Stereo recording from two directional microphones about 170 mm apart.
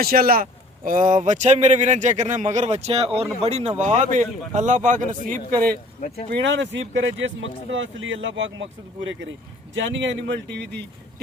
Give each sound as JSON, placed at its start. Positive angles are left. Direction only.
{"t": 0.0, "sound": "a man's voice", "side_deg": -60}
{"t": 6.0, "sound": "speech", "side_deg": 40}
{"t": 6.4, "sound": "speech", "side_deg": -90}
{"t": 9.7, "sound": "speech", "side_deg": -90}